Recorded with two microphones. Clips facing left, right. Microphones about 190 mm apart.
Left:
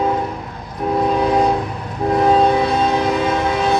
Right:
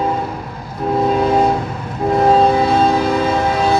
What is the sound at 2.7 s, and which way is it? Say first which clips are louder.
Train: right 3 dB; 30° right (ahead or behind).